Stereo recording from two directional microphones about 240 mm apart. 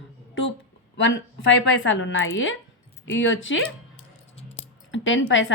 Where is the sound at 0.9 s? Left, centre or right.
Left.